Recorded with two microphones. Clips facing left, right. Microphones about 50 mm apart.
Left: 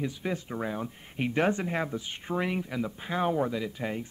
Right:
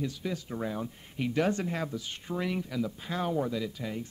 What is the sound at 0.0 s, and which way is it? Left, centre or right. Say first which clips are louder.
Speech: left 2 dB; left.